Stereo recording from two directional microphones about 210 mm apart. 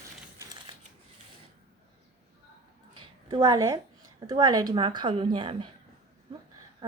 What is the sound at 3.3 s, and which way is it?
A woman's voice, 20° right (ahead or behind).